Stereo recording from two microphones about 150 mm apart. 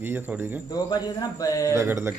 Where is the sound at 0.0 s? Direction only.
15° right (ahead or behind).